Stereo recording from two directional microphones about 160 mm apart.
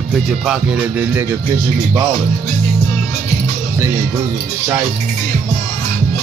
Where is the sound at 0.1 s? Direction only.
5° right (ahead or behind).